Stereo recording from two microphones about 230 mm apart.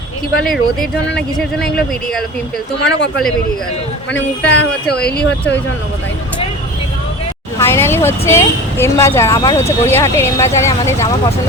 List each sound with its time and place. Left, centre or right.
0.4 s speech: centre
4.1 s speech: centre
5.1 s speech: left
7.6 s a woman's voice: centre